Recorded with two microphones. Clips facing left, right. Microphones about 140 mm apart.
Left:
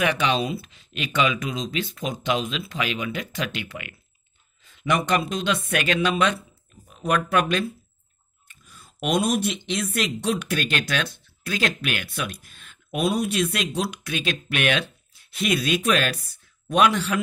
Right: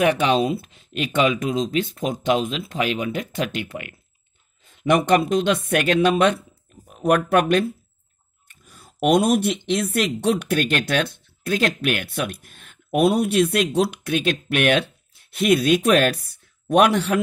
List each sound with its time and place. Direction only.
0.0 s speech: 45° right (ahead or behind)